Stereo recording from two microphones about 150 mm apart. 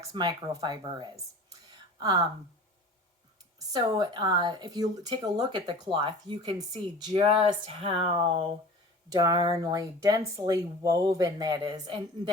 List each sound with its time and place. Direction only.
0.1 s speech: 25° right (ahead or behind)
3.7 s speech: 30° right (ahead or behind)
7.2 s speech: 40° right (ahead or behind)
9.0 s speech: 25° right (ahead or behind)